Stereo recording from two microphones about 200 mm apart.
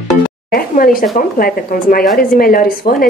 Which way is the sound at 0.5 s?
45° left (ahead or behind).